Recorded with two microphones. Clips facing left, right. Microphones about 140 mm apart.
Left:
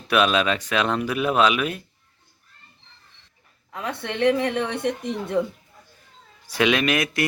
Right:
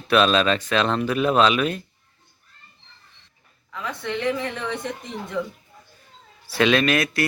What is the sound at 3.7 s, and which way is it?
A woman's voice, 55° left (ahead or behind).